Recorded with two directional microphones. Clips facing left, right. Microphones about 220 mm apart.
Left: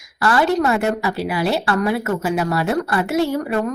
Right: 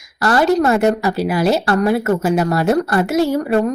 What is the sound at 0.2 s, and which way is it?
Speech, 40° right (ahead or behind).